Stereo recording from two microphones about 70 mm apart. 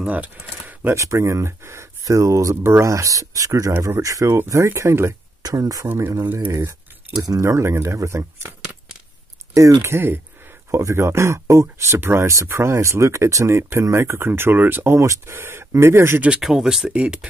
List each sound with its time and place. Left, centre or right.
0.0 s a sound: centre
0.9 s speech: right
2.5 s speech: right
4.6 s speech: right
5.4 s speech: right
5.9 s speech: right
7.2 s speech: right
7.4 s speech: right
9.5 s speech: right
15.0 s speech: right
15.3 s speech: right
16.3 s speech: centre